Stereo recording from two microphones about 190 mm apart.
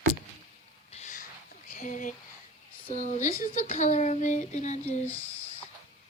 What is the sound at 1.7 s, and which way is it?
Speech, 40° left (ahead or behind).